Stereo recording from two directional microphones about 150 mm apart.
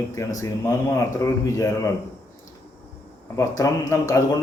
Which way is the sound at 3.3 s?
20° left (ahead or behind).